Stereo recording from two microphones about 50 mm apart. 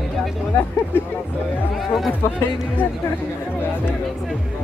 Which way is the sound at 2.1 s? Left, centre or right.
Left.